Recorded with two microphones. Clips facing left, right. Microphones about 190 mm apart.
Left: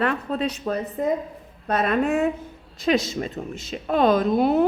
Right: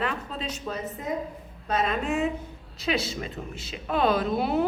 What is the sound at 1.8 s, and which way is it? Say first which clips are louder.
Speech: left 8 dB; 55° left (ahead or behind).